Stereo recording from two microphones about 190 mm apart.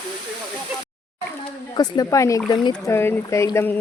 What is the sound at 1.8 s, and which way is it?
Speech, 20° left (ahead or behind).